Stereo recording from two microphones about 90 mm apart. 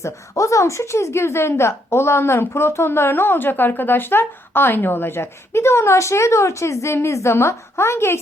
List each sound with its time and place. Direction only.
0.0 s a woman's voice: 35° left (ahead or behind)